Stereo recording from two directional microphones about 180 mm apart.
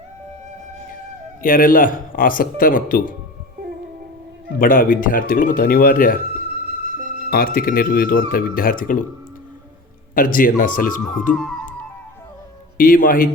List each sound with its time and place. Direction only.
1.4 s a man's voice: 50° left (ahead or behind)
4.5 s a man's voice: 50° left (ahead or behind)
7.0 s music: 50° right (ahead or behind)
7.3 s a man's voice: 55° left (ahead or behind)
10.2 s a man's voice: 50° left (ahead or behind)
11.3 s flute: centre (ahead or behind)
12.7 s a man's voice: 50° left (ahead or behind)